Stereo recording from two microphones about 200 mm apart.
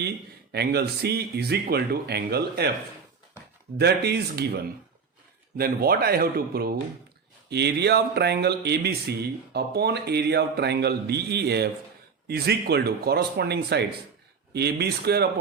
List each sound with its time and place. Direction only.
0.5 s speech: 55° right (ahead or behind)
3.8 s speech: 55° right (ahead or behind)